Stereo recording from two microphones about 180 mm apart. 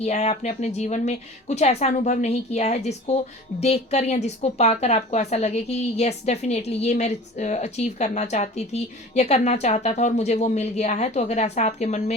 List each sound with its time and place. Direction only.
0.0 s a woman's voice: 40° left (ahead or behind)